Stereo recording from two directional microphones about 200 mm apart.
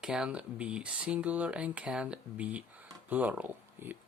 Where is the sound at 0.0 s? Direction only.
5° right (ahead or behind).